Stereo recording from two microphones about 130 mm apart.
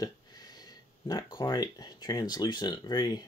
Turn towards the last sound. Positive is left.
turn(degrees=35)  # may be behind; listen again after turning